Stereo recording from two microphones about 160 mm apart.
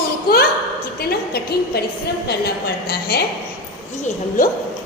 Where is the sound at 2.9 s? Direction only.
80° left.